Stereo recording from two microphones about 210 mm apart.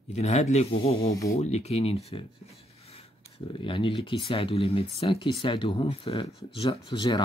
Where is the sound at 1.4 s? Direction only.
30° left (ahead or behind).